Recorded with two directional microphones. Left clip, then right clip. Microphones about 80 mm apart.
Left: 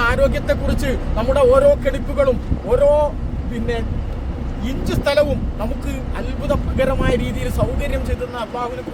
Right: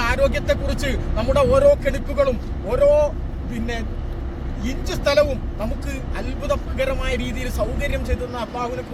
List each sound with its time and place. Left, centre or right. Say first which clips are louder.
0.0 s speech: left 3 dB; left
4.7 s speech: left 1 dB; left